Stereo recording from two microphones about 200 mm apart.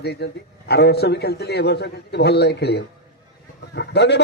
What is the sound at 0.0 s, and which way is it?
A man's voice, 55° left (ahead or behind).